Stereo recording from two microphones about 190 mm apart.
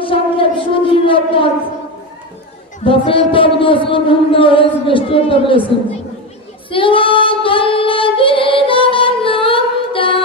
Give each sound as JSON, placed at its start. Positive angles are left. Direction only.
{"t": 0.0, "sound": "civil defense siren", "side_deg": 30}
{"t": 2.8, "sound": "speech", "side_deg": 30}
{"t": 6.7, "sound": "child singing", "side_deg": 25}